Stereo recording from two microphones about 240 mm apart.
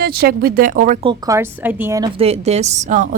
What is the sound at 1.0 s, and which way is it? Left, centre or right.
A woman's voice, centre.